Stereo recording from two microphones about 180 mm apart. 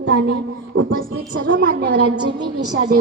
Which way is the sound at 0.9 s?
50° right (ahead or behind).